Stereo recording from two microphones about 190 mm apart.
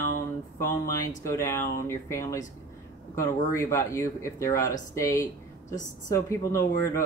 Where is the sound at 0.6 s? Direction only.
15° left (ahead or behind).